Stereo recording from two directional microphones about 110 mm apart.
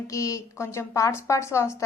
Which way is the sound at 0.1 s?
30° left (ahead or behind).